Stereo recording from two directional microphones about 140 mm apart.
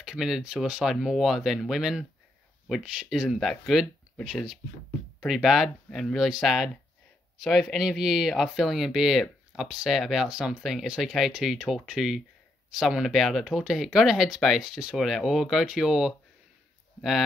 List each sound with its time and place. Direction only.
0.0 s speech: 5° right (ahead or behind)